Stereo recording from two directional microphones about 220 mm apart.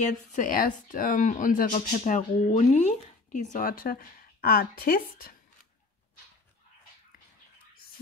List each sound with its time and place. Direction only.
0.0 s speech: 35° left (ahead or behind)